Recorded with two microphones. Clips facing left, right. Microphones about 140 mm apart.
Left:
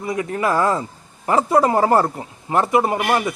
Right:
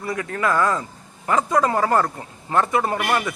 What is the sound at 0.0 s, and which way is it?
A man's voice, 20° left (ahead or behind).